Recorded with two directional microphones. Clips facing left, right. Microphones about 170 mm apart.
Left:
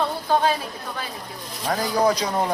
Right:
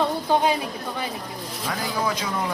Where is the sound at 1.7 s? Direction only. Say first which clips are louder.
Left 6 dB; 40° left (ahead or behind).